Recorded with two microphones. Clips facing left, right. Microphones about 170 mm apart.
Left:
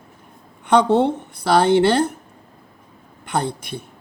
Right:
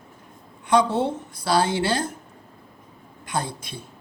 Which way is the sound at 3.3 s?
60° left (ahead or behind).